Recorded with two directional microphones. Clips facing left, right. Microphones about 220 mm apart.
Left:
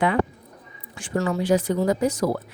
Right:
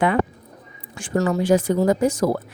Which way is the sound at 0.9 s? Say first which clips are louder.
Right 3 dB; 45° right (ahead or behind).